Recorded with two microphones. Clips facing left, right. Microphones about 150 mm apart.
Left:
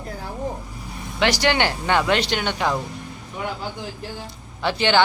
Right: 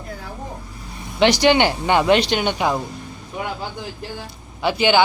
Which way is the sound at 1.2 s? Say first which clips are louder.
Right 5 dB; 20° right (ahead or behind).